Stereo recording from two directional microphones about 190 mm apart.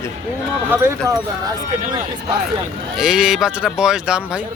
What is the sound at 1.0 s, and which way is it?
Speech, 15° right (ahead or behind).